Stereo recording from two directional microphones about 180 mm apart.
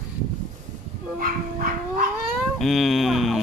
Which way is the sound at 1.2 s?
50° right (ahead or behind).